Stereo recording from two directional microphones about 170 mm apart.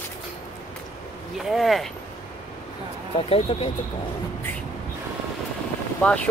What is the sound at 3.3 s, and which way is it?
Speech, 35° left (ahead or behind).